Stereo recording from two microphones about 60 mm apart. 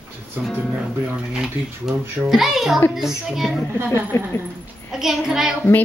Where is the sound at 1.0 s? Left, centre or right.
Centre.